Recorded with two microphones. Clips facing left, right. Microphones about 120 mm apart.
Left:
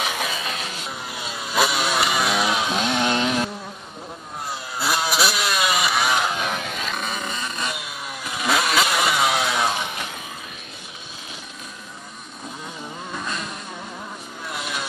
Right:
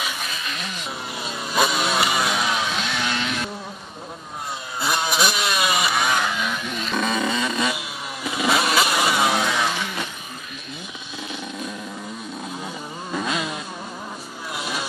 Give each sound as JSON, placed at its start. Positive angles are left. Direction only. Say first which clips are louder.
{"t": 0.0, "sound": "a sound", "louder": "left 4 dB", "side_deg": 70}
{"t": 1.1, "sound": "vehicle", "louder": "even", "side_deg": 0}
{"t": 2.7, "sound": "chainsaw", "louder": "left 4 dB", "side_deg": 20}
{"t": 4.7, "sound": "vehicle", "louder": "even", "side_deg": 5}
{"t": 6.3, "sound": "a sound", "louder": "left 1 dB", "side_deg": 50}
{"t": 7.0, "sound": "vehicle", "louder": "right 6 dB", "side_deg": -90}
{"t": 7.7, "sound": "vehicle", "louder": "right 1 dB", "side_deg": -5}
{"t": 13.2, "sound": "vehicle", "louder": "right 6 dB", "side_deg": -90}
{"t": 14.5, "sound": "vehicle", "louder": "right 1 dB", "side_deg": -5}